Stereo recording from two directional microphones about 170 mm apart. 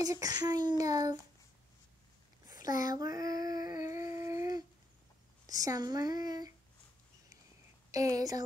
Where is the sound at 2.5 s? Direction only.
50° left (ahead or behind).